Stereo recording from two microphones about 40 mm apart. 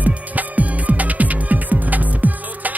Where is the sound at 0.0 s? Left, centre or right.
Right.